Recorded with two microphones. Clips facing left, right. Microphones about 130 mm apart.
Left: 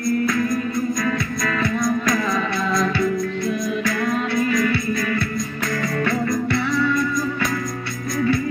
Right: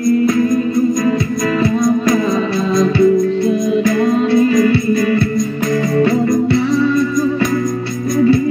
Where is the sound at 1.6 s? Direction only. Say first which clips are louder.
Right 7 dB; 25° right (ahead or behind).